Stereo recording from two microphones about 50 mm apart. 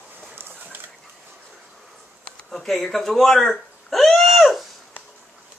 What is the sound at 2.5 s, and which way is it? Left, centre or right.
Speech, centre.